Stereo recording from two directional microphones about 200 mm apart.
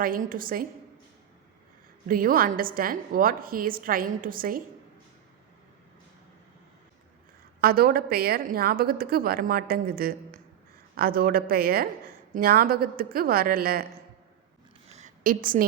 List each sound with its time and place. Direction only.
0.0 s a woman's voice: 45° right (ahead or behind)
2.0 s a woman's voice: 45° right (ahead or behind)
7.6 s a woman's voice: 50° right (ahead or behind)
14.9 s a sound: 40° right (ahead or behind)